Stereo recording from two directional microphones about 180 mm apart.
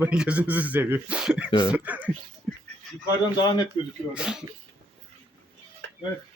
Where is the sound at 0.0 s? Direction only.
5° right (ahead or behind).